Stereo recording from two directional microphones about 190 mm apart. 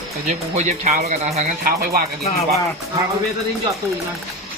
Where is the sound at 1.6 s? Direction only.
50° right (ahead or behind).